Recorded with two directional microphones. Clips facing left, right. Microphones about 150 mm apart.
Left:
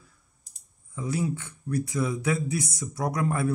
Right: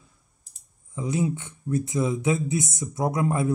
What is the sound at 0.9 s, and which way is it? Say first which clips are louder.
Speech: right 3 dB; 20° right (ahead or behind).